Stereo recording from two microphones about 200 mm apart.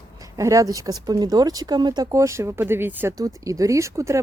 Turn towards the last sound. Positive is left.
turn(degrees=-15)  # may be behind; listen again after turning